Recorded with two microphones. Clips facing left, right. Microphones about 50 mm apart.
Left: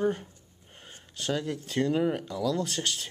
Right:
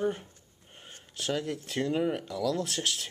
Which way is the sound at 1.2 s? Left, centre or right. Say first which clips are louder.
Left 1 dB; centre.